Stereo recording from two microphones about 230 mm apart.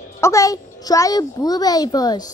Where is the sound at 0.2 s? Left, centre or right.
Centre.